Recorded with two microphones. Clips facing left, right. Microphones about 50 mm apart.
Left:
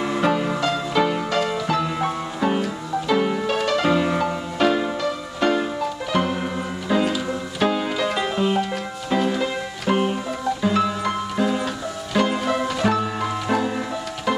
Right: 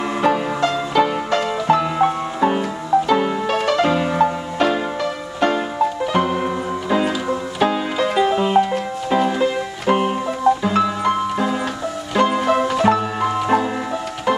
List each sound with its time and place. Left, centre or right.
0.0 s music: centre